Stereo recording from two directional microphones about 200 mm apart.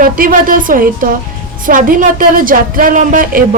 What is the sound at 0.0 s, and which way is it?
A woman's voice, 45° right (ahead or behind).